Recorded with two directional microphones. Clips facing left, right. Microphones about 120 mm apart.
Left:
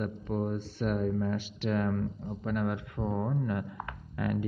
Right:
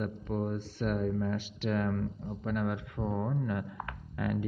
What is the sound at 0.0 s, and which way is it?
Speech, 30° left (ahead or behind).